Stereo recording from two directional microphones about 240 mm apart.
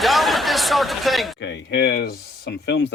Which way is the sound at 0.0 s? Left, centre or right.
Centre.